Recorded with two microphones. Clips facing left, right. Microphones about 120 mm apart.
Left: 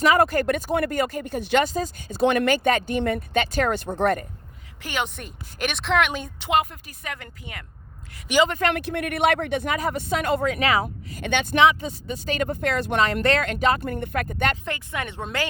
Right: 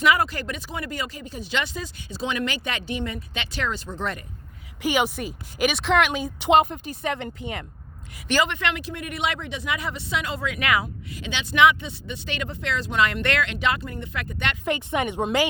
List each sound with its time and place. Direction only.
0.0 s speech: 45° left (ahead or behind)
1.6 s speech: 40° left (ahead or behind)
4.8 s speech: 10° right (ahead or behind)
6.5 s speech: 25° right (ahead or behind)
8.4 s speech: 40° left (ahead or behind)
8.7 s speech: 60° left (ahead or behind)
10.5 s speech: 35° left (ahead or behind)
11.2 s speech: 55° left (ahead or behind)
11.5 s speech: 35° left (ahead or behind); by 13.0 s 55° left (ahead or behind)
13.2 s speech: 40° left (ahead or behind)
13.8 s speech: 55° left (ahead or behind)
14.7 s speech: 20° right (ahead or behind)